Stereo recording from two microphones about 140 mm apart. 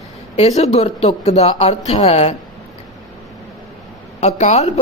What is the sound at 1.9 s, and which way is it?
Speech, 45° left (ahead or behind).